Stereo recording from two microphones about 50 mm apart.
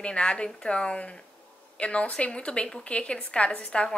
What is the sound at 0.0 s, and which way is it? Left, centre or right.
A woman's voice, left.